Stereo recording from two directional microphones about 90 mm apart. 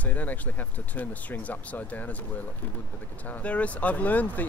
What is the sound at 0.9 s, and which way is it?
Speech, 20° left (ahead or behind).